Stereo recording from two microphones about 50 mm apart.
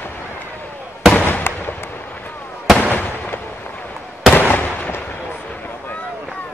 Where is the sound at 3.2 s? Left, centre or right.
Left.